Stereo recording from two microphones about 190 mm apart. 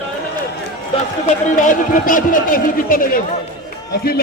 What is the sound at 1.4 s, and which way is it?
A man's voice, 40° left (ahead or behind).